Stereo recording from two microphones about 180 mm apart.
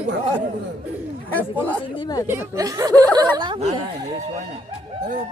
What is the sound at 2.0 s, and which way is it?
Speech, 20° left (ahead or behind).